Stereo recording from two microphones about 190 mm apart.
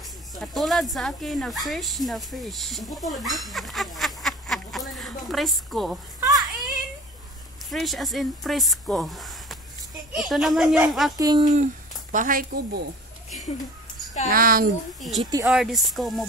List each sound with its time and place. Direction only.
0.3 s speech: centre (ahead or behind)
6.2 s a sound: 20° right (ahead or behind)
7.7 s speech: centre (ahead or behind)
11.1 s speech: 20° right (ahead or behind)
11.5 s a woman's voice: 40° right (ahead or behind)
14.3 s speech: 50° right (ahead or behind)
15.0 s speech: centre (ahead or behind)